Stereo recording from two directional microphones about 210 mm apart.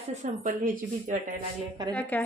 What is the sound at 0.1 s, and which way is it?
Speech, 35° right (ahead or behind).